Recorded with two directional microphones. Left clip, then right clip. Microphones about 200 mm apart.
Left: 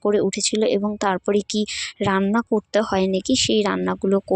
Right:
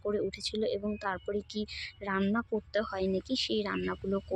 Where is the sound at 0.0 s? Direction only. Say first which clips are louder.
Left 13 dB; 45° left (ahead or behind).